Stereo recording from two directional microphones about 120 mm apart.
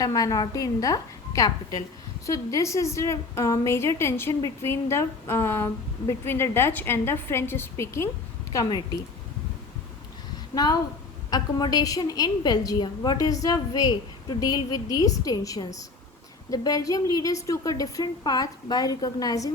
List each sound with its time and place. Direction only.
0.0 s a woman's voice: 30° left (ahead or behind)
8.5 s a woman's voice: 35° left (ahead or behind)
10.5 s a woman's voice: 35° left (ahead or behind)